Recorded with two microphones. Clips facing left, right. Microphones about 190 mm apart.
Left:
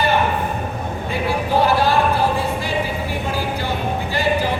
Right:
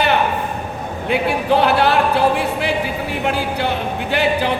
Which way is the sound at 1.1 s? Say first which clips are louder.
Right 4 dB; 70° right (ahead or behind).